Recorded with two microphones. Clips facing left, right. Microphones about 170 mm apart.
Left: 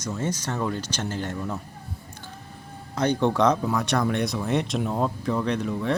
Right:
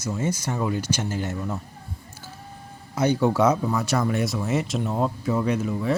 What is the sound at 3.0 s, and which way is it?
Speech, 5° right (ahead or behind).